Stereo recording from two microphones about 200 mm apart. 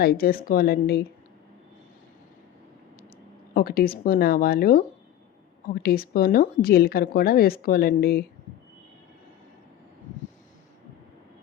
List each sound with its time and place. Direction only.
0.0 s speech: 50° left (ahead or behind)
3.5 s speech: 45° left (ahead or behind)